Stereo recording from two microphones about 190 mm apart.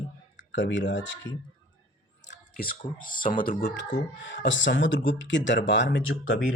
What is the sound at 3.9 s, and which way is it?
Speech, 70° left (ahead or behind).